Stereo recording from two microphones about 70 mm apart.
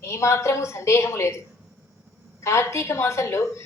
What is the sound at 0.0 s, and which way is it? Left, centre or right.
A woman's voice, left.